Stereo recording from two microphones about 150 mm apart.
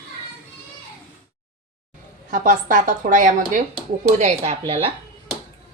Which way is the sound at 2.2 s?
60° right (ahead or behind).